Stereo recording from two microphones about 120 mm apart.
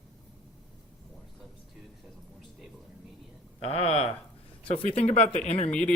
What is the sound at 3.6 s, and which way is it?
Speech, 55° left (ahead or behind).